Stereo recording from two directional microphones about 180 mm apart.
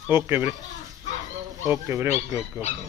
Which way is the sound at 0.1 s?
10° right (ahead or behind).